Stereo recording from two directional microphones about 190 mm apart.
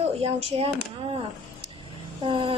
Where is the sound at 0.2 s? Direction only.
30° right (ahead or behind).